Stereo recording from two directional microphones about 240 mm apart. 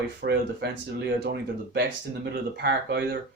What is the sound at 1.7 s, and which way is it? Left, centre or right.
Speech, right.